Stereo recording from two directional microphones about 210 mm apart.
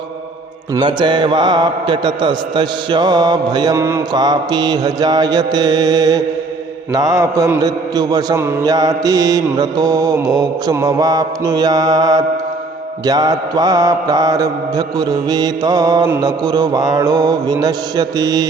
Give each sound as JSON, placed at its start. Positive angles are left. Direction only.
{"t": 0.8, "sound": "mantra", "side_deg": -20}